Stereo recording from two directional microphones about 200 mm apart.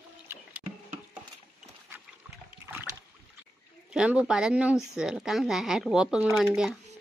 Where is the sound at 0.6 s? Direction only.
25° right (ahead or behind).